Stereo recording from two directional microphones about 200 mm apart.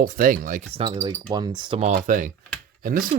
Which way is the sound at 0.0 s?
45° right (ahead or behind).